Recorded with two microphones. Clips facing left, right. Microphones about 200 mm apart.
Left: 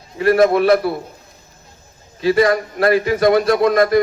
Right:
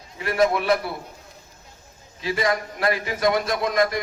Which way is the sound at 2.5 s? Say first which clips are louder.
Left 8 dB; 40° left (ahead or behind).